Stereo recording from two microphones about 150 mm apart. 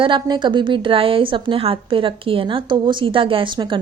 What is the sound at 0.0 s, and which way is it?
A woman's voice, 30° right (ahead or behind).